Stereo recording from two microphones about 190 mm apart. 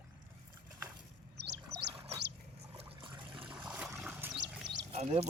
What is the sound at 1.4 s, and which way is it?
Chirp, 60° right (ahead or behind).